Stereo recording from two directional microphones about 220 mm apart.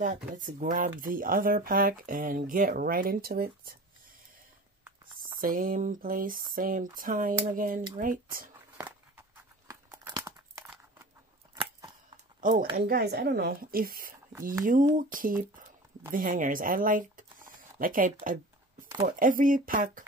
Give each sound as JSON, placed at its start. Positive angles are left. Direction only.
{"t": 0.0, "sound": "speech", "side_deg": -35}
{"t": 5.4, "sound": "speech", "side_deg": -40}
{"t": 8.7, "sound": "a sound", "side_deg": -10}
{"t": 9.7, "sound": "tearing", "side_deg": -15}
{"t": 12.4, "sound": "speech", "side_deg": -40}